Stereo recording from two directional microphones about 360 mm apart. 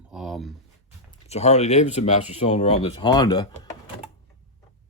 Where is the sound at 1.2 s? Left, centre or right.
Centre.